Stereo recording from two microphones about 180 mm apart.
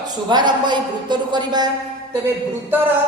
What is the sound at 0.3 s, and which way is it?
A woman's voice, 25° right (ahead or behind).